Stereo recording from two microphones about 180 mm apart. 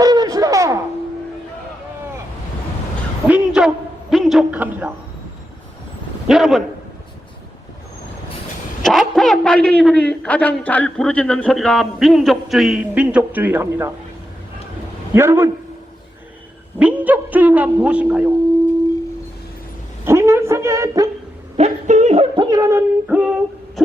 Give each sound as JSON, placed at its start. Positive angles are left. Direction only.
{"t": 0.0, "sound": "music", "side_deg": -20}
{"t": 3.2, "sound": "a sound", "side_deg": -5}
{"t": 4.1, "sound": "a man's voice", "side_deg": 0}
{"t": 6.2, "sound": "a man's voice", "side_deg": 0}
{"t": 8.8, "sound": "a man's voice", "side_deg": 0}
{"t": 15.1, "sound": "a man's voice", "side_deg": -15}
{"t": 16.7, "sound": "a man's voice", "side_deg": -10}
{"t": 20.1, "sound": "a woman's voice", "side_deg": -15}
{"t": 21.5, "sound": "music", "side_deg": -40}
{"t": 22.4, "sound": "speech", "side_deg": -20}
{"t": 23.0, "sound": "a sound", "side_deg": -5}